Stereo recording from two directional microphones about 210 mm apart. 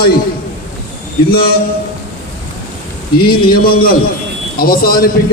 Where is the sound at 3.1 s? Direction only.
45° left (ahead or behind).